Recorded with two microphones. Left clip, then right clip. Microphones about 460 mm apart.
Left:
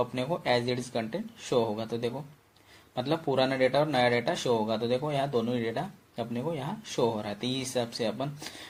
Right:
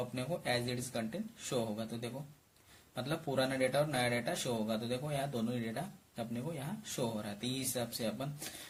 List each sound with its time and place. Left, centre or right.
0.1 s speech: right